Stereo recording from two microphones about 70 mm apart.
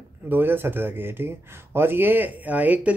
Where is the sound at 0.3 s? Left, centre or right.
Right.